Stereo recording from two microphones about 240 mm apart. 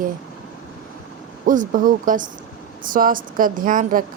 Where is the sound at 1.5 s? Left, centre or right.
Right.